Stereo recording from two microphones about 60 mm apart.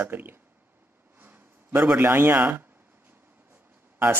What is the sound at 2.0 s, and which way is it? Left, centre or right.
Speech, right.